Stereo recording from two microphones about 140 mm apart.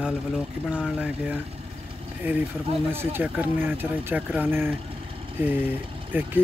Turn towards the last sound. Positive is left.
turn(degrees=-15)  # may be behind; listen again after turning